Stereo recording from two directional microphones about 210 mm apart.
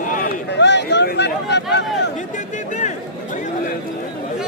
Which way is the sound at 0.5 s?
55° left (ahead or behind).